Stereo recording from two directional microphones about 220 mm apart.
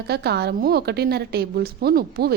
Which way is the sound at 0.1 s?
45° right (ahead or behind).